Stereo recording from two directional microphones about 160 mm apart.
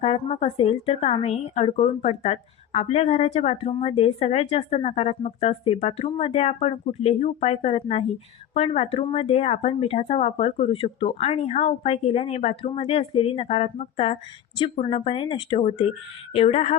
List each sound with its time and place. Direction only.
0.0 s a woman's voice: 40° left (ahead or behind)